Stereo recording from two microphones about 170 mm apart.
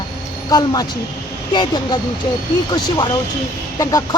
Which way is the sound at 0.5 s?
25° left (ahead or behind).